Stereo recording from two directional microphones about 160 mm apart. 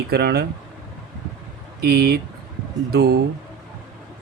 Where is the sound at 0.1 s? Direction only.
85° right.